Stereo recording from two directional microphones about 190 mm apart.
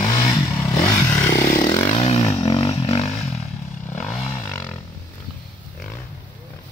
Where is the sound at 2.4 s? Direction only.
30° left (ahead or behind).